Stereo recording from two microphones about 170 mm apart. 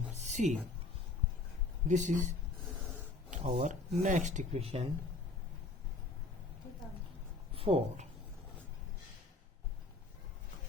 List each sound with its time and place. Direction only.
0.2 s a sound: 45° right (ahead or behind)
1.9 s speech: 45° right (ahead or behind)
7.5 s speech: 35° right (ahead or behind)